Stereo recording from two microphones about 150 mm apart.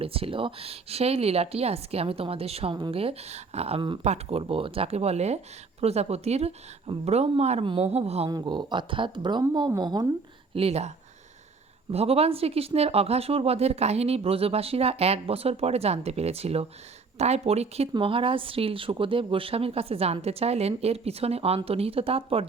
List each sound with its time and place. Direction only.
0.0 s speech: 40° right (ahead or behind)
4.0 s speech: 45° right (ahead or behind)
8.3 s a woman's voice: 30° right (ahead or behind)
10.5 s speech: 40° right (ahead or behind)